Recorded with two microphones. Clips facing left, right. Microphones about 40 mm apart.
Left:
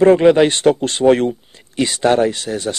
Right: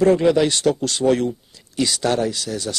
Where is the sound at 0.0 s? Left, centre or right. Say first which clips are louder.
Left 5 dB; left.